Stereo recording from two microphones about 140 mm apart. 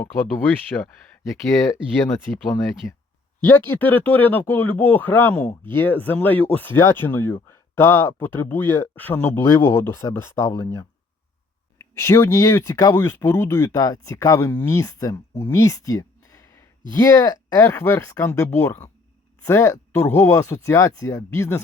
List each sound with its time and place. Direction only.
0.7 s speech: 20° left (ahead or behind)
2.3 s speech: 10° left (ahead or behind)